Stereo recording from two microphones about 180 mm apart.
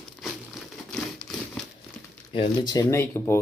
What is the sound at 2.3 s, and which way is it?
Speech, 25° left (ahead or behind).